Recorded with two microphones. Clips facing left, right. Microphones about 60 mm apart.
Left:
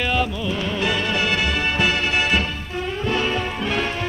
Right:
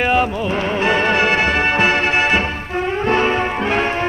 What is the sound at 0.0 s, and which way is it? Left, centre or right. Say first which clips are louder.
Music: right 6 dB; right.